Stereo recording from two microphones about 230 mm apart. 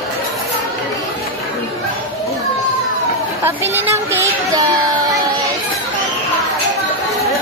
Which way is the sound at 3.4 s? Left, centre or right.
Centre.